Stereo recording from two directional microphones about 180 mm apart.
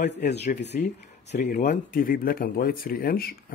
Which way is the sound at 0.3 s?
65° left (ahead or behind).